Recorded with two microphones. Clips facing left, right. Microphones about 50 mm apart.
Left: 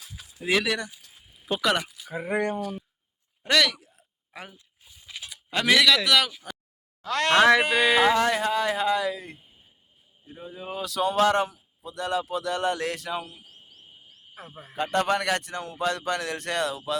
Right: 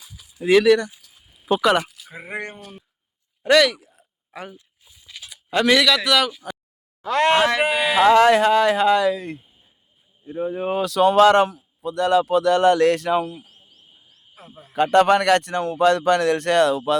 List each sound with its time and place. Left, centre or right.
0.4 s speech: centre
1.5 s speech: centre
3.4 s a sound: centre
5.0 s a sound: centre
5.3 s speech: centre
7.0 s speech: centre
8.0 s speech: right
10.3 s a man's voice: right
14.3 s speech: left
14.8 s a man's voice: right